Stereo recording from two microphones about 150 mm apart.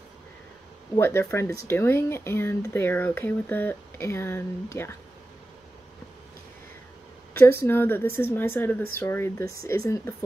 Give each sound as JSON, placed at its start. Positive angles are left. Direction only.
{"t": 0.9, "sound": "speech", "side_deg": 15}
{"t": 7.6, "sound": "speech", "side_deg": 15}